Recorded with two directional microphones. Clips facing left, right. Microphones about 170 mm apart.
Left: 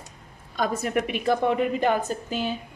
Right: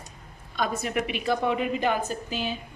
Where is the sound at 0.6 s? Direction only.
45° left (ahead or behind).